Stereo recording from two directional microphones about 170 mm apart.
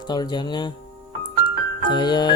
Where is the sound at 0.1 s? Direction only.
25° left (ahead or behind).